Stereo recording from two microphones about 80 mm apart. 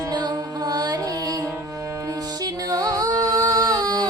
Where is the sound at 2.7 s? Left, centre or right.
Right.